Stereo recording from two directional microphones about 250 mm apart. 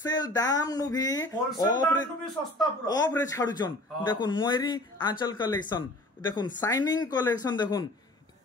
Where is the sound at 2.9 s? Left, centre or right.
Centre.